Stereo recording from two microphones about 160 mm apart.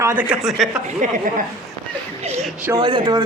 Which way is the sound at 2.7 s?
25° right (ahead or behind).